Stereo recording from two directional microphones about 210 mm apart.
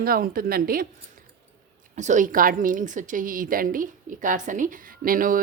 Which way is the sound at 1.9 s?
35° right (ahead or behind).